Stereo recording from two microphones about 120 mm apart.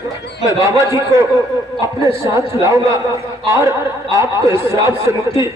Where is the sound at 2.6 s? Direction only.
25° right (ahead or behind).